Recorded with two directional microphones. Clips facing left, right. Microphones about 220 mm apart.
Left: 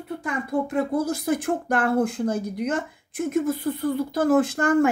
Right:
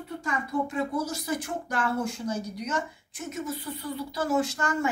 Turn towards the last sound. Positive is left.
turn(degrees=55)  # may be behind; listen again after turning